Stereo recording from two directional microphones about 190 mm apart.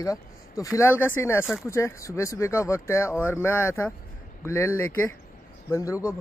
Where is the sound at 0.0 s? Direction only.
15° left (ahead or behind).